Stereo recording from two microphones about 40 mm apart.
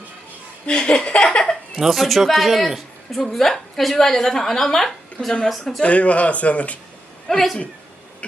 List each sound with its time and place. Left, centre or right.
0.7 s a sound: left
1.7 s a woman's voice: centre
5.8 s speech: left
7.3 s speech: centre